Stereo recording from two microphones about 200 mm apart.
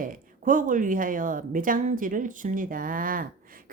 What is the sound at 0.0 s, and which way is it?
Speech, 45° right (ahead or behind).